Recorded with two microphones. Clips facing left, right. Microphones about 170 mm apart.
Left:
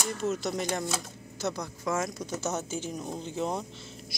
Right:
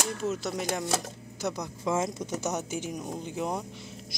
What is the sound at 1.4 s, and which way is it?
Speech, 20° right (ahead or behind).